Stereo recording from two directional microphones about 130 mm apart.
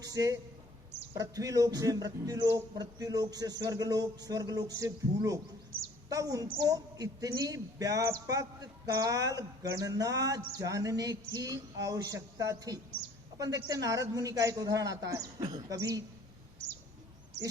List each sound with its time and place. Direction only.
0.0 s a man's voice: 25° right (ahead or behind)